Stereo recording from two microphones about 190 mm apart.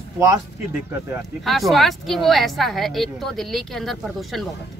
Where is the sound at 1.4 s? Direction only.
Centre (ahead or behind).